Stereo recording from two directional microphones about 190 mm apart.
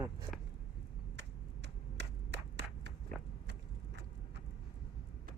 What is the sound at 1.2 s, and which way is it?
Clapping, 65° right (ahead or behind).